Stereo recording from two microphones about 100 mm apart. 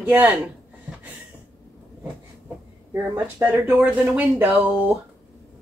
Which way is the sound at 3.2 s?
15° right (ahead or behind).